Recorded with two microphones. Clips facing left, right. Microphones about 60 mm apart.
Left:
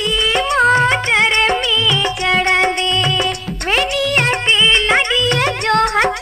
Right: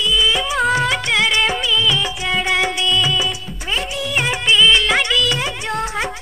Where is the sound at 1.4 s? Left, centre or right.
Centre.